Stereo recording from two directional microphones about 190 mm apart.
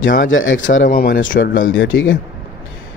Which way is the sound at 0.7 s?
45° left (ahead or behind).